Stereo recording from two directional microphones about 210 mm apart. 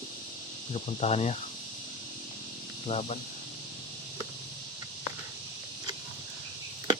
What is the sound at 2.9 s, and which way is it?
Speech, 30° left (ahead or behind).